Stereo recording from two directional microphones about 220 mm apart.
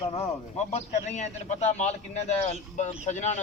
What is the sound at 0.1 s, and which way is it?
A man's voice, 30° left (ahead or behind).